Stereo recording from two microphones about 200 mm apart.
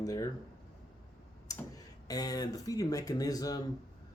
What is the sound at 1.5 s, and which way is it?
Tick-tock, 15° left (ahead or behind).